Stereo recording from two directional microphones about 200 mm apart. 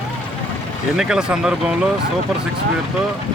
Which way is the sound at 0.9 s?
5° right (ahead or behind).